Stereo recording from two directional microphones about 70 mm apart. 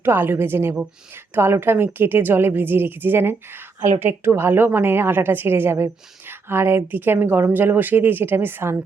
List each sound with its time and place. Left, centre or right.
0.0 s speech: right